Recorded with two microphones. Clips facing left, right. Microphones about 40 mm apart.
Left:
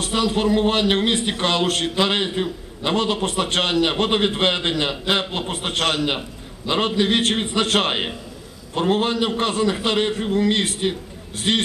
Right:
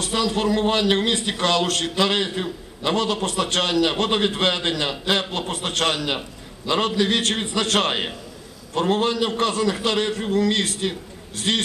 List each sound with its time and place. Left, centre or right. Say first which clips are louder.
0.0 s a man's voice: left 2 dB; centre